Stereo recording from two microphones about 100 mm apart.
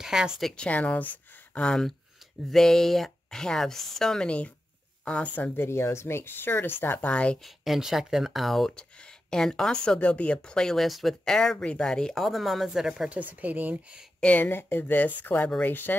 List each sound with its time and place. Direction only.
0.0 s speech: 5° right (ahead or behind)
0.7 s speech: 15° left (ahead or behind)
7.4 s speech: centre (ahead or behind)
14.2 s speech: 15° left (ahead or behind)